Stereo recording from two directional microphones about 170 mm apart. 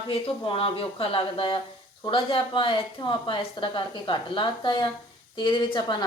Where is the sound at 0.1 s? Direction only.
35° left (ahead or behind).